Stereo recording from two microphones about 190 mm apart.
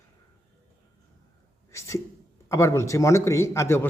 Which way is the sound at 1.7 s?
15° left (ahead or behind).